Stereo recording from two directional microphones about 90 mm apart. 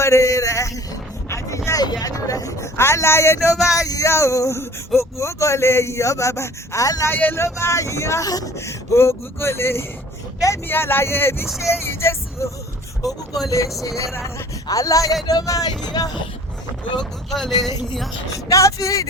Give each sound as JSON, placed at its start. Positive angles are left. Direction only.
{"t": 0.0, "sound": "a sound", "side_deg": 30}
{"t": 1.8, "sound": "vehicle", "side_deg": 45}
{"t": 3.8, "sound": "speech", "side_deg": 40}
{"t": 7.1, "sound": "speech", "side_deg": 20}
{"t": 7.4, "sound": "speech", "side_deg": 35}
{"t": 8.5, "sound": "speech", "side_deg": 30}
{"t": 13.1, "sound": "speech", "side_deg": 0}
{"t": 13.8, "sound": "speech", "side_deg": 35}
{"t": 17.0, "sound": "speech", "side_deg": 5}
{"t": 18.4, "sound": "speech", "side_deg": 35}